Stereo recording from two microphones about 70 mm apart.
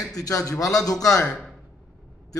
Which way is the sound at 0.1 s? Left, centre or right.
Left.